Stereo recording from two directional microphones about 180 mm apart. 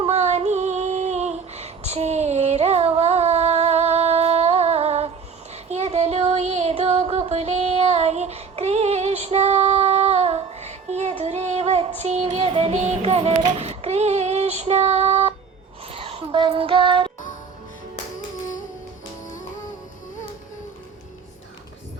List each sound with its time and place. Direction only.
0.0 s female singing: 40° right (ahead or behind)
5.7 s child singing: 40° right (ahead or behind)
11.2 s music: 35° right (ahead or behind)
15.9 s child singing: 30° right (ahead or behind)
19.2 s music: 45° left (ahead or behind)